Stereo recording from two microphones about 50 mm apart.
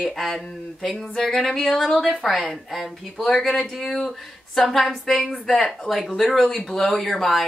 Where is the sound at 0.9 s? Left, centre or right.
Left.